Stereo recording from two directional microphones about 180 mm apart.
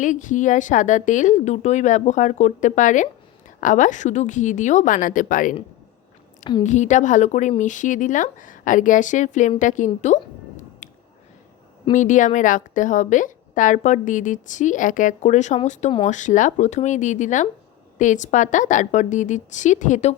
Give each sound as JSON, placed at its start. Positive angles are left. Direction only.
{"t": 0.0, "sound": "a woman's voice", "side_deg": 45}
{"t": 6.6, "sound": "a woman's voice", "side_deg": 40}
{"t": 10.8, "sound": "a sound", "side_deg": 40}
{"t": 11.9, "sound": "a woman's voice", "side_deg": 45}